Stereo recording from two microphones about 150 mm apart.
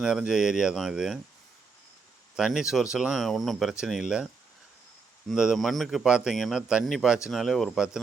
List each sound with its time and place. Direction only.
0.0 s speech: 5° right (ahead or behind)
2.3 s speech: 5° right (ahead or behind)
5.3 s speech: centre (ahead or behind)